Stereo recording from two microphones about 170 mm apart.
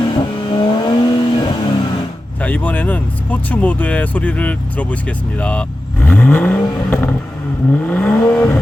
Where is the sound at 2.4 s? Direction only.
10° left (ahead or behind).